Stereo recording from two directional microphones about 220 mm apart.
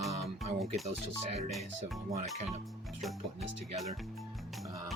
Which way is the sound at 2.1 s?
30° right (ahead or behind).